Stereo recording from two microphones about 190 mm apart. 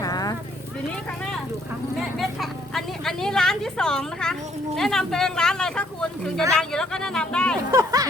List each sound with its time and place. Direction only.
0.0 s horse: 20° left (ahead or behind)
2.1 s vehicle: centre (ahead or behind)
4.8 s speech: centre (ahead or behind)
7.7 s a sound: 15° right (ahead or behind)